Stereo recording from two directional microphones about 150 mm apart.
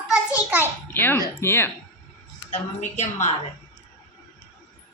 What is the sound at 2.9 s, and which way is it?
Speech, 50° left (ahead or behind).